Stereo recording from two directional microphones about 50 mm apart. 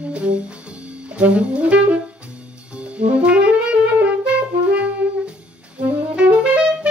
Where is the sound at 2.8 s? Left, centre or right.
Right.